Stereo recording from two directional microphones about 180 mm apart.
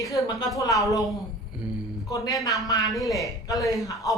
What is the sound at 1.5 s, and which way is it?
Speech, 5° right (ahead or behind).